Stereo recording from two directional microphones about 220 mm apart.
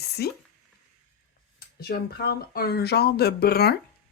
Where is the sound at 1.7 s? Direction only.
45° left (ahead or behind).